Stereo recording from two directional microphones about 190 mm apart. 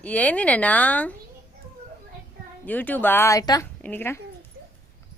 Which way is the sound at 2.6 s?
10° left (ahead or behind).